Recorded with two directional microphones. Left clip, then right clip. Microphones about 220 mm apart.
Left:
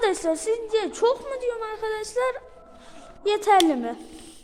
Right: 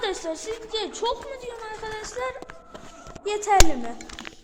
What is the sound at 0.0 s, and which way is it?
A woman's voice, 60° left (ahead or behind).